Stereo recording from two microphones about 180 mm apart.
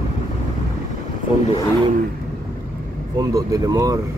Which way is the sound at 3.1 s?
20° right (ahead or behind).